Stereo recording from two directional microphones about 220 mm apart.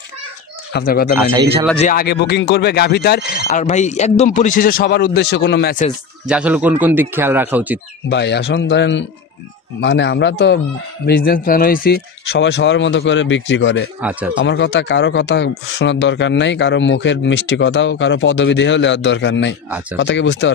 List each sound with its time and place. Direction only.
0.7 s speech: 45° left (ahead or behind)
1.1 s speech: 15° right (ahead or behind)
1.8 s speech: 40° left (ahead or behind)
6.2 s speech: 5° right (ahead or behind)
8.1 s speech: 50° left (ahead or behind)
11.1 s speech: 45° left (ahead or behind)